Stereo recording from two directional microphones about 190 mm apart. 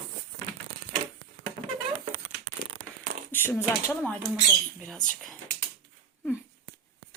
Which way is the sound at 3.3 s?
10° left (ahead or behind).